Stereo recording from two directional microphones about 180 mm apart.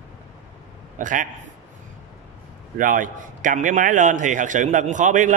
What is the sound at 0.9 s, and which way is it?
Speech, 45° right (ahead or behind).